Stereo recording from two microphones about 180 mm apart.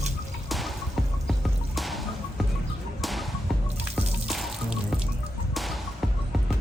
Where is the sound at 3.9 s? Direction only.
Centre (ahead or behind).